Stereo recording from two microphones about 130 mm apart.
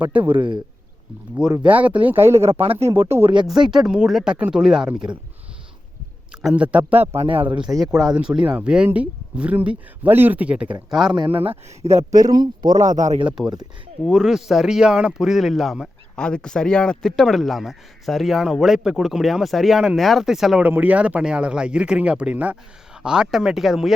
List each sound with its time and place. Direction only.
0.0 s speech: 10° right (ahead or behind)
0.3 s a man's voice: 40° right (ahead or behind)
1.4 s speech: 10° right (ahead or behind)
3.7 s speech: 5° right (ahead or behind)
6.3 s speech: 5° right (ahead or behind)
7.2 s speech: 45° right (ahead or behind)
7.6 s speech: centre (ahead or behind)
11.1 s speech: 40° right (ahead or behind); by 12.0 s 55° right (ahead or behind)
12.1 s speech: 30° right (ahead or behind)
12.8 s speech: 70° right (ahead or behind)
13.4 s speech: centre (ahead or behind)
20.7 s speech: 15° right (ahead or behind)